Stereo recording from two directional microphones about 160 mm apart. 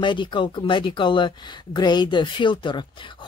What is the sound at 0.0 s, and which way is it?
Speech, 30° left (ahead or behind).